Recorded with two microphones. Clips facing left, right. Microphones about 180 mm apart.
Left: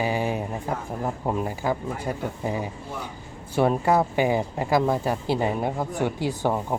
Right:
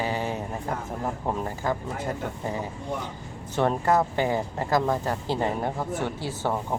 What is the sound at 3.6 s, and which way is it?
Speech, 10° left (ahead or behind).